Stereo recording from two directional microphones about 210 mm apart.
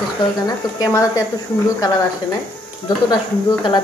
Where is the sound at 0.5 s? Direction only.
15° left (ahead or behind).